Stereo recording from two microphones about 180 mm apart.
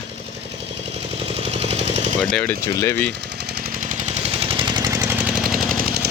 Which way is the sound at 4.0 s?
35° right (ahead or behind).